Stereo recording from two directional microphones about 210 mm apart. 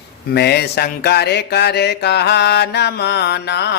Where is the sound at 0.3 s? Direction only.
50° left (ahead or behind).